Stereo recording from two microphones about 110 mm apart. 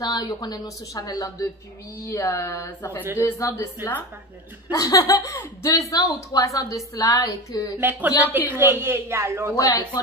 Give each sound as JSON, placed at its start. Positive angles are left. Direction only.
{"t": 0.0, "sound": "a woman's voice", "side_deg": 40}
{"t": 8.2, "sound": "a man's voice", "side_deg": -15}
{"t": 9.6, "sound": "a woman's voice", "side_deg": 30}